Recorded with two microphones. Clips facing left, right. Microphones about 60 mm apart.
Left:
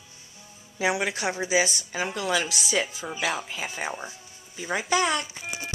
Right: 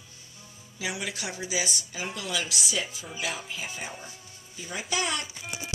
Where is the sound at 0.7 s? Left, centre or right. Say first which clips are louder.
Left 8 dB; left.